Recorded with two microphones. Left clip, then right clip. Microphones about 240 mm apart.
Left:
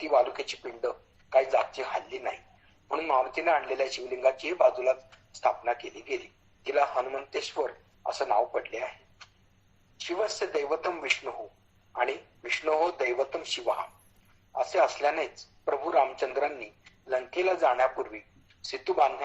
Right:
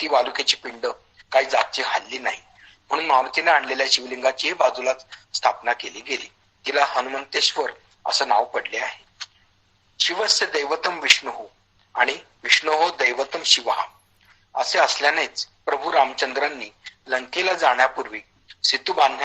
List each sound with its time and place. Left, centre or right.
0.0 s a man's voice: right